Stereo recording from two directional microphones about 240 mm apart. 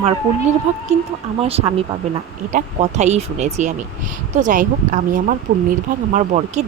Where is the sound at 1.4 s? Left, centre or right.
Right.